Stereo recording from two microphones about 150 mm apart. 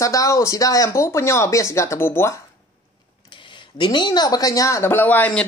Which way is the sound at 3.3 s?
35° left (ahead or behind).